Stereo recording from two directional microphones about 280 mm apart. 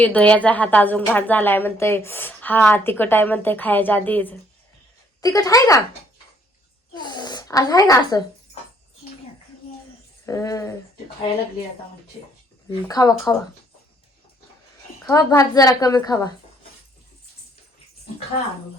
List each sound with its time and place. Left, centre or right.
0.0 s a woman's voice: centre
6.9 s a woman's voice: centre
10.2 s a woman's voice: centre
12.9 s a woman's voice: centre
15.0 s a woman's voice: centre